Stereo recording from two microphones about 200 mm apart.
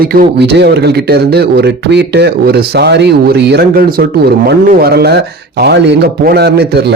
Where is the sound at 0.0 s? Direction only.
50° right (ahead or behind).